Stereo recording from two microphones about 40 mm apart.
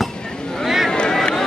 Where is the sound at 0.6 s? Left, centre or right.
Centre.